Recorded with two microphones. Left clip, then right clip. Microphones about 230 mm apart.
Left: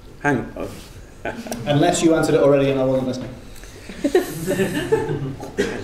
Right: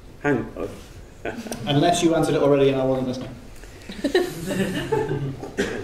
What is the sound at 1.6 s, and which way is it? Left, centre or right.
A man's voice, left.